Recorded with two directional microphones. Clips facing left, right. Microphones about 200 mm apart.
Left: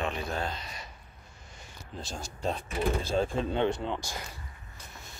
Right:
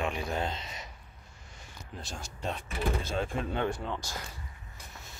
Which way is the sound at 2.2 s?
35° left (ahead or behind).